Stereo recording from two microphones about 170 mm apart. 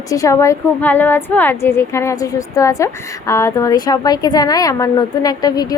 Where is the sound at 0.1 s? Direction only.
20° left (ahead or behind).